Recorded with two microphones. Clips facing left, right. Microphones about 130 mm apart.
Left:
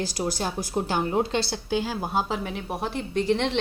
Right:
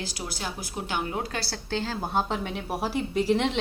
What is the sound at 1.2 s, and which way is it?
A woman's voice, 25° left (ahead or behind).